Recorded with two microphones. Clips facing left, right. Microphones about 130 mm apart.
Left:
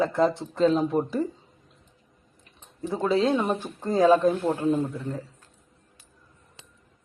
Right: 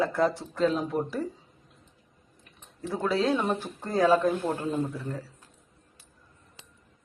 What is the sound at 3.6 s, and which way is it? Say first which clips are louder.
Speech: left 3 dB; 15° left (ahead or behind).